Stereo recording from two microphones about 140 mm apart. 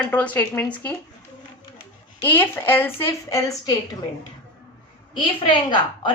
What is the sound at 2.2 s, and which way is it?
A woman's voice, 15° left (ahead or behind).